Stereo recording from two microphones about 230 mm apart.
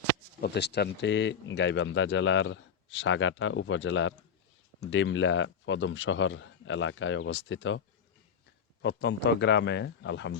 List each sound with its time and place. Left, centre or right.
0.4 s speech: left
8.8 s speech: left